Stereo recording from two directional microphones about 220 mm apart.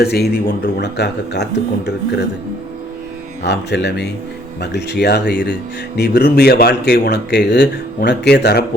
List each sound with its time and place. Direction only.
0.0 s speech: 45° left (ahead or behind)
3.4 s speech: 50° left (ahead or behind)